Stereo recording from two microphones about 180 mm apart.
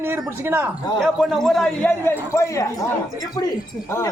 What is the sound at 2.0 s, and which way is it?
Speech, 15° left (ahead or behind).